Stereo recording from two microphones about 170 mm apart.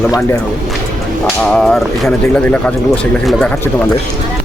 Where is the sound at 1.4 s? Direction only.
5° left (ahead or behind).